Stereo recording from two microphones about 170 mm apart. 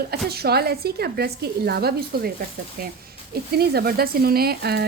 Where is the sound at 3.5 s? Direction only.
70° right (ahead or behind).